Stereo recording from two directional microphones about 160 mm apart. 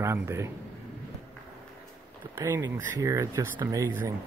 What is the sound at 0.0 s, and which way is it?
Speech, 15° right (ahead or behind).